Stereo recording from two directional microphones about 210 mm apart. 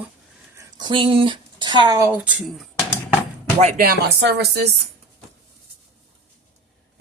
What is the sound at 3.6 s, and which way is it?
Speech, 35° right (ahead or behind).